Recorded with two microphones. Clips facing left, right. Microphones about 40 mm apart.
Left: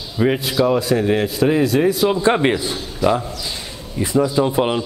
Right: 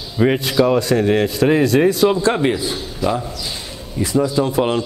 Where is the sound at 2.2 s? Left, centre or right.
Left.